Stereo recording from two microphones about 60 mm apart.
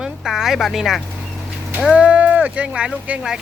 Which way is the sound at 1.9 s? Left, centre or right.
Right.